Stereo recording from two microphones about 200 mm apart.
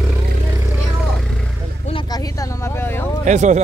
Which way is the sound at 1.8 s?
25° left (ahead or behind).